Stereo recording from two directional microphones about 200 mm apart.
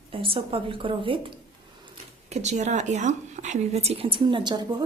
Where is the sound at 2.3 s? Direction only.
35° right (ahead or behind).